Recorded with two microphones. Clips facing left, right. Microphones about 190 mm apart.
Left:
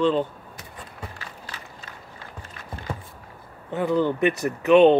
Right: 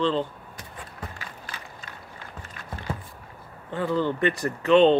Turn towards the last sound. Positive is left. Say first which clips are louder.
# left 3 dB
turn(degrees=15)  # may be behind; listen again after turning